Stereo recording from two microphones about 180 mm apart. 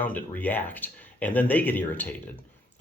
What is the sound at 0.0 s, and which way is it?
Speech, 10° left (ahead or behind).